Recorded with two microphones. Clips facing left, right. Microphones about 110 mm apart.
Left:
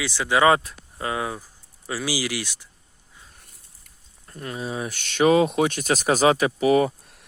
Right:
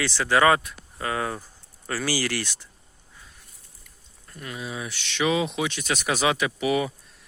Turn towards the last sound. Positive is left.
turn(degrees=40)  # may be behind; listen again after turning